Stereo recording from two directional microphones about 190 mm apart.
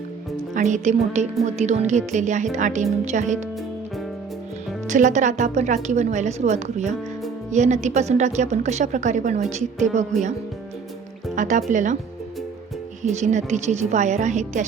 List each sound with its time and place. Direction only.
0.5 s a woman's voice: 40° right (ahead or behind)
4.9 s a woman's voice: 40° right (ahead or behind)
11.3 s a woman's voice: 40° right (ahead or behind)
13.0 s a woman's voice: 40° right (ahead or behind)